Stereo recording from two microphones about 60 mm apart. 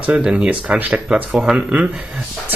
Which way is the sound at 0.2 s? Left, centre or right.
Centre.